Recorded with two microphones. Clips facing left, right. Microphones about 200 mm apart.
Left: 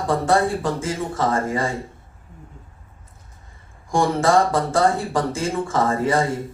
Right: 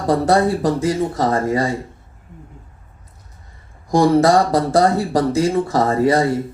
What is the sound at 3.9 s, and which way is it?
Speech, 40° right (ahead or behind).